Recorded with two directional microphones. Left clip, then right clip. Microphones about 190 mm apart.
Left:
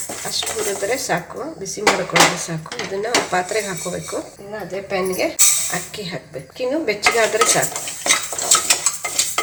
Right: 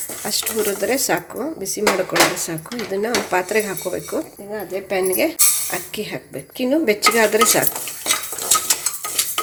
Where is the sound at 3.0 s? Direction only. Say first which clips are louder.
Left 2 dB; 45° right (ahead or behind).